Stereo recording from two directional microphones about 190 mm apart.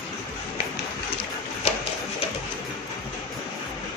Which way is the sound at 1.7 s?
35° left (ahead or behind).